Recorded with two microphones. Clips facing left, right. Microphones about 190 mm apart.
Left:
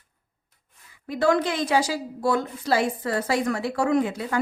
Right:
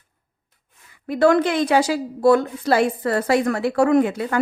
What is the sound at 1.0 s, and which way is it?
A woman's voice, 60° right (ahead or behind).